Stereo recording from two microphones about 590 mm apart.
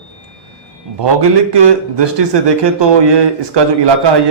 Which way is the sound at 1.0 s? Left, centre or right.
Right.